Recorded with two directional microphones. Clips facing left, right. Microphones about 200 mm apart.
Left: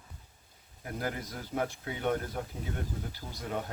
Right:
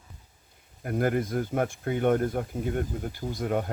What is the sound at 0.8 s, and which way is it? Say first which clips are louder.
Speech: right 10 dB; 55° right (ahead or behind).